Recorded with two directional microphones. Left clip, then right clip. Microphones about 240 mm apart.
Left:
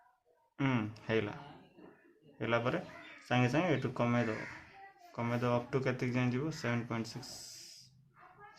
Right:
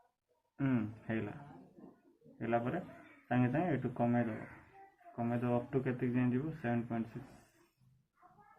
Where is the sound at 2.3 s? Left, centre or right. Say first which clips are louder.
Left 3 dB; left.